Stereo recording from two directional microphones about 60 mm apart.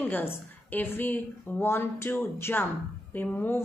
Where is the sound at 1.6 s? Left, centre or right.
Left.